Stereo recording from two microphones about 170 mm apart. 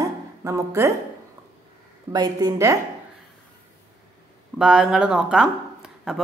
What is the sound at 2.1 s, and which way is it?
Speech, 25° right (ahead or behind).